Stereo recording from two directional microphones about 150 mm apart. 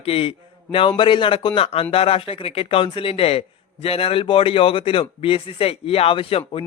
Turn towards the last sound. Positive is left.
turn(degrees=40)  # may be behind; listen again after turning